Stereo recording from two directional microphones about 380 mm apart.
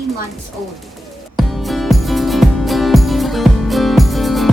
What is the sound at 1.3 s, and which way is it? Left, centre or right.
Music, centre.